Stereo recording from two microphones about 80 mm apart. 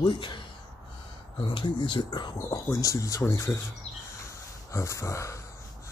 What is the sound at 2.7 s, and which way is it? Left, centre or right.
Speech, left.